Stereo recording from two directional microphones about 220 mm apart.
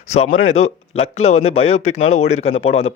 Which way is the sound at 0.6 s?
30° left (ahead or behind).